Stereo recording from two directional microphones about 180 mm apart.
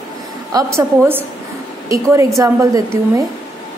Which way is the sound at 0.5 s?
15° right (ahead or behind).